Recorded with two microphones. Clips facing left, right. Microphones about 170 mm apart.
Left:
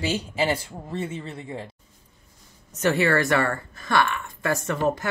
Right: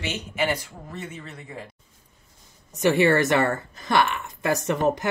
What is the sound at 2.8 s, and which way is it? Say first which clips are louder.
Speech: right 2 dB; 15° right (ahead or behind).